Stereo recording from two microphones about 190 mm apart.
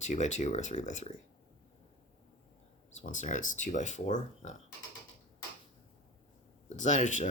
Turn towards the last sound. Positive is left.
turn(degrees=40)  # may be behind; listen again after turning